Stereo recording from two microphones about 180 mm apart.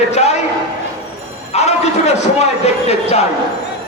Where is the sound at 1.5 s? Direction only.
35° left (ahead or behind).